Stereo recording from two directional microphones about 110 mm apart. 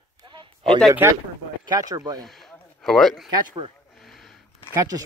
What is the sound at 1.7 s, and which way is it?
Speech, 35° right (ahead or behind).